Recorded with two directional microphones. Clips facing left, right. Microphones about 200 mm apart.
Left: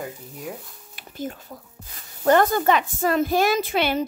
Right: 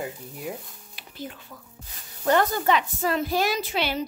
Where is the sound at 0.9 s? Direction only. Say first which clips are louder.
Left 6 dB; 45° left (ahead or behind).